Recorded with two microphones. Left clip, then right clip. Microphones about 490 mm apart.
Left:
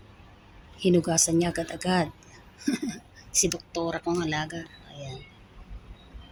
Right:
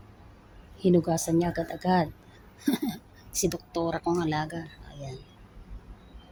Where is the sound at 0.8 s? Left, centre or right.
Right.